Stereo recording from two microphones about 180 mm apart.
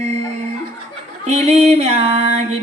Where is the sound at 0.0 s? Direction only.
35° right (ahead or behind).